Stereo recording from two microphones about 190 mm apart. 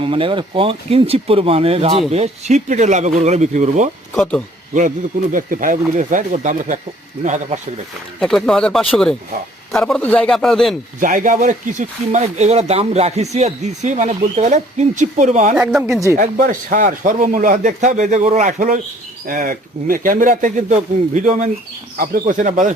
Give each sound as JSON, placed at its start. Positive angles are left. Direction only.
{"t": 0.0, "sound": "speech", "side_deg": -30}
{"t": 4.2, "sound": "speech", "side_deg": 5}
{"t": 5.3, "sound": "speech", "side_deg": -45}
{"t": 8.2, "sound": "speech", "side_deg": 0}
{"t": 11.0, "sound": "speech", "side_deg": -45}
{"t": 15.5, "sound": "speech", "side_deg": -10}
{"t": 16.1, "sound": "speech", "side_deg": -45}